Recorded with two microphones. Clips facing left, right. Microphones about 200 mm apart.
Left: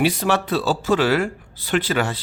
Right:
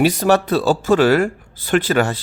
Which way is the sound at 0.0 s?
45° right (ahead or behind).